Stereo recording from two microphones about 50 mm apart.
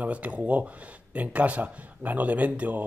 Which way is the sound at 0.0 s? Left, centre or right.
Right.